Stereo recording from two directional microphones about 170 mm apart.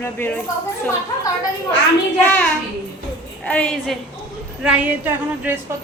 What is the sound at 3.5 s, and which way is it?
Speech, 5° left (ahead or behind).